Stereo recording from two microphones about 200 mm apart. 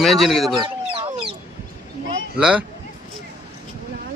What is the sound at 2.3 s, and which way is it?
Speech, 5° right (ahead or behind).